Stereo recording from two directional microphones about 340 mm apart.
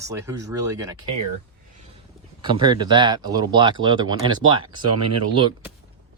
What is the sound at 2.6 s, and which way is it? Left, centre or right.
Speech, centre.